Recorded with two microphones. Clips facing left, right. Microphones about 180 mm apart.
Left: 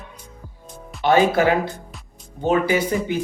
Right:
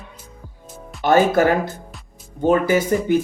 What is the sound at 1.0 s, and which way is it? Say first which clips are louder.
Speech: right 1 dB; 50° right (ahead or behind).